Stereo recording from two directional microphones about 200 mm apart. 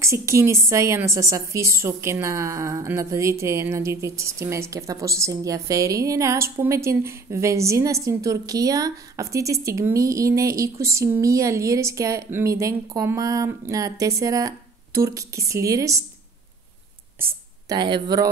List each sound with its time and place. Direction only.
0.0 s a woman's voice: 15° right (ahead or behind)
17.2 s speech: 20° right (ahead or behind)